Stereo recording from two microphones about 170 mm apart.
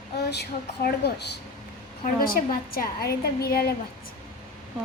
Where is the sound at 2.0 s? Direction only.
60° left (ahead or behind).